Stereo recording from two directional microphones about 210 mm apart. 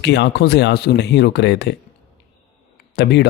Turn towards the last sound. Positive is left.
turn(degrees=50)  # may be behind; listen again after turning